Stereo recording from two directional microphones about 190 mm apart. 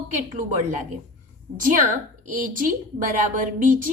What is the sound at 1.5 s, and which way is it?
A woman's voice, 45° right (ahead or behind).